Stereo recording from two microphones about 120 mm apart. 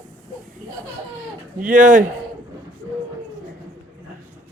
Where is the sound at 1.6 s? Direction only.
90° right.